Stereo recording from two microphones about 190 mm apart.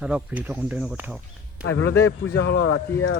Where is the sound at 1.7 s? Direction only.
90° left.